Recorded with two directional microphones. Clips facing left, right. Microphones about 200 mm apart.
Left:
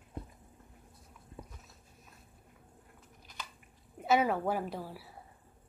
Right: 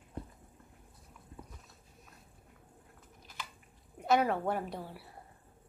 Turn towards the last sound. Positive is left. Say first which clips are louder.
# left 1 dB
turn(degrees=5)  # may be behind; listen again after turning